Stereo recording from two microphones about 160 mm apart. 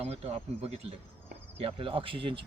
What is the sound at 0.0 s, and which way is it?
Speech, 40° right (ahead or behind).